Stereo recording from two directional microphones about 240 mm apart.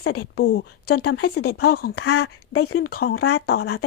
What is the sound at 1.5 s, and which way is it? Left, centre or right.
Speech, left.